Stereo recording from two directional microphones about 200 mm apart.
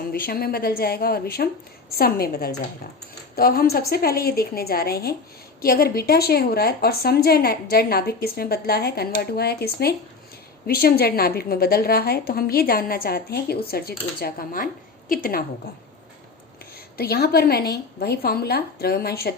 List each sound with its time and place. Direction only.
0.1 s a woman's voice: 50° left (ahead or behind)
17.0 s a woman's voice: 50° left (ahead or behind)